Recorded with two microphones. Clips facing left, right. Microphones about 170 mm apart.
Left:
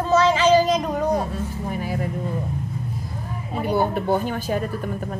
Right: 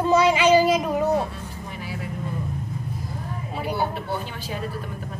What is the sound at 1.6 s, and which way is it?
Vehicle, 45° left (ahead or behind).